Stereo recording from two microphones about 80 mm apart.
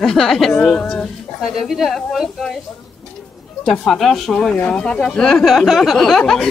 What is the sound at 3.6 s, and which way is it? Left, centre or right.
Speech, centre.